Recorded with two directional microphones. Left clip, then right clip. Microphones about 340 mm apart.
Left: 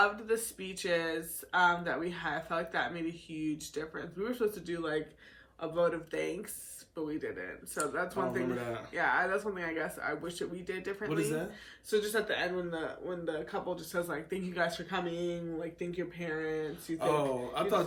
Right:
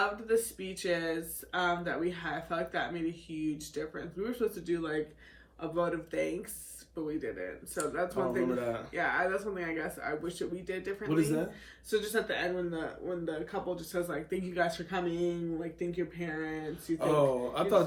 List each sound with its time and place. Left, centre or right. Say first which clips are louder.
0.0 s speech: even; centre